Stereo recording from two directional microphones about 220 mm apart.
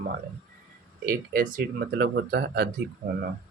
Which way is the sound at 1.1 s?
40° right (ahead or behind).